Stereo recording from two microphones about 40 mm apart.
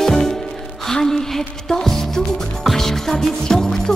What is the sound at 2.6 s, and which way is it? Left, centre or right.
Music, centre.